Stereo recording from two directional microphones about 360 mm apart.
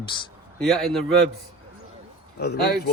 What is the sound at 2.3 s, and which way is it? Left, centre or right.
Speech, left.